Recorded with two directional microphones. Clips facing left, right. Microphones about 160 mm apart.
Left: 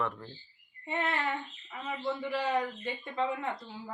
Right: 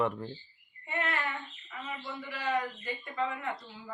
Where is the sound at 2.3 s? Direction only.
30° left (ahead or behind).